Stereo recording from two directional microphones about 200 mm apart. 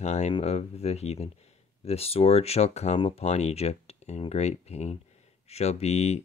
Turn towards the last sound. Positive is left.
turn(degrees=30)  # may be behind; listen again after turning